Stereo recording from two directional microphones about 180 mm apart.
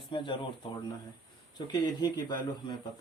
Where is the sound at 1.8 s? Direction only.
25° left (ahead or behind).